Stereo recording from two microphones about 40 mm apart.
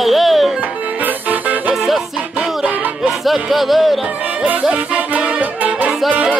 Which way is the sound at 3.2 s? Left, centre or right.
Centre.